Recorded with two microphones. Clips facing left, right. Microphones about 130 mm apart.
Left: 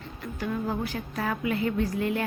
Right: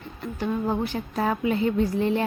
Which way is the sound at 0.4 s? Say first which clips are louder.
Right 4 dB; 25° right (ahead or behind).